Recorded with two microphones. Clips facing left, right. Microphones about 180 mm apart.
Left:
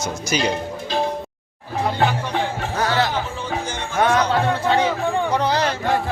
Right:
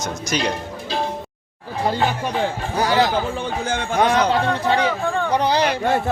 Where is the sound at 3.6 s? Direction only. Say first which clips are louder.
Right 5 dB; 55° right (ahead or behind).